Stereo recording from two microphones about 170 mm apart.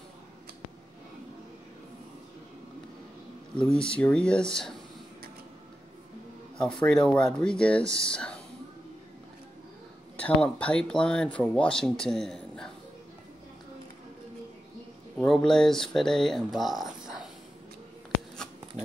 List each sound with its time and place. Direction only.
3.7 s speech: 5° left (ahead or behind)
6.6 s speech: 5° left (ahead or behind)
10.1 s speech: 5° left (ahead or behind)
15.1 s speech: 5° left (ahead or behind)
16.5 s a sound: centre (ahead or behind)